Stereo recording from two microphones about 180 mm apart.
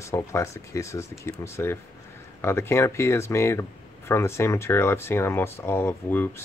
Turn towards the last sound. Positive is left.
turn(degrees=15)  # may be behind; listen again after turning